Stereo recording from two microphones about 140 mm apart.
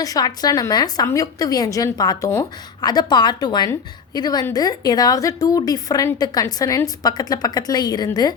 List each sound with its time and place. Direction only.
0.0 s a woman's voice: 25° left (ahead or behind)